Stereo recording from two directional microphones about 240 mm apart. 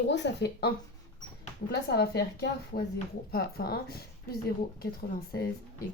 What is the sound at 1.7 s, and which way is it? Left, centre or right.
A woman's voice, left.